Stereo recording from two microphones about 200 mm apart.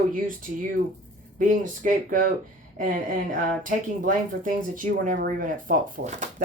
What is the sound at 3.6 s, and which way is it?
Speech, 40° right (ahead or behind).